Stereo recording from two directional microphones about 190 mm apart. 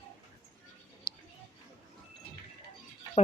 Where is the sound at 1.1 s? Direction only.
25° left (ahead or behind).